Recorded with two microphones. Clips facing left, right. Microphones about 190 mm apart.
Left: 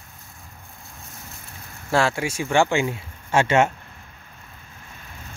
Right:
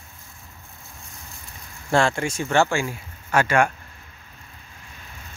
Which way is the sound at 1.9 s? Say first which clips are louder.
Right 1 dB; 5° left (ahead or behind).